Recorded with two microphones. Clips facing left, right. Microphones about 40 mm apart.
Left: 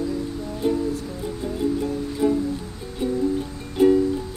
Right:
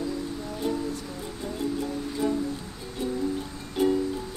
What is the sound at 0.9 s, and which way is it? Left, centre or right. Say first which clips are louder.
Music: left 6 dB; centre.